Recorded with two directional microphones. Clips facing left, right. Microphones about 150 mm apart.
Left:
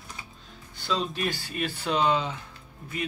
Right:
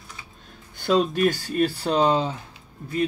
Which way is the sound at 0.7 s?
50° right (ahead or behind).